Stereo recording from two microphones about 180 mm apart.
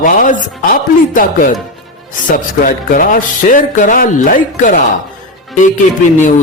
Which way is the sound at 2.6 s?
50° left (ahead or behind).